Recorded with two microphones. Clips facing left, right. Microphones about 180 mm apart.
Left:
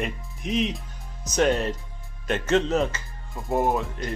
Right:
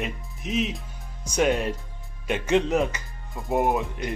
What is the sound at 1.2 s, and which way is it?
Music, 10° right (ahead or behind).